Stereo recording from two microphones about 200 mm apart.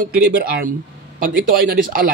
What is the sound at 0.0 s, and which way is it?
A man's voice, 50° right (ahead or behind).